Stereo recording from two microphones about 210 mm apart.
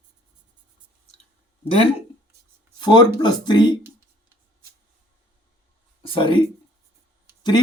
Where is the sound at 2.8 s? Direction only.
20° left (ahead or behind).